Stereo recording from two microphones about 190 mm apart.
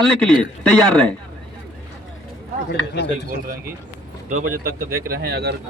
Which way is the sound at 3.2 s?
45° right (ahead or behind).